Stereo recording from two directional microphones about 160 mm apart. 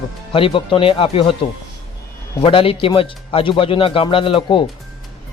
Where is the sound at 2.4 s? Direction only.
35° left (ahead or behind).